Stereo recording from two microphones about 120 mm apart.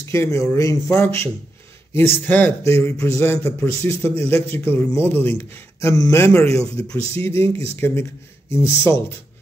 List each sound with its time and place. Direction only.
0.1 s a man's voice: 25° left (ahead or behind)